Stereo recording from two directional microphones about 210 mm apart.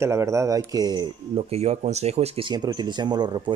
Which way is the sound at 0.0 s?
15° right (ahead or behind).